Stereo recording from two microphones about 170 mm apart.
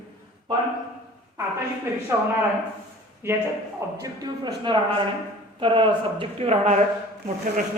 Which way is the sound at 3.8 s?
15° right (ahead or behind).